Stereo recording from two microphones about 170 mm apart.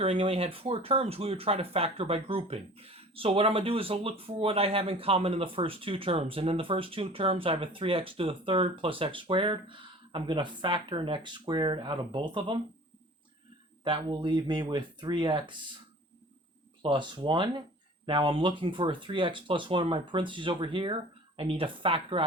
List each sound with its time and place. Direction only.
0.0 s speech: 35° right (ahead or behind)
13.8 s speech: 30° right (ahead or behind)
16.8 s speech: 30° right (ahead or behind)